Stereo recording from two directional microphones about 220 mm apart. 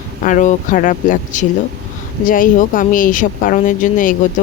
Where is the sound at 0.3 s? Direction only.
35° left (ahead or behind).